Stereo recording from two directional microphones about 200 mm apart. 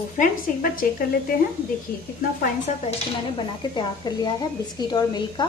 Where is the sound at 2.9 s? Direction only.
25° left (ahead or behind).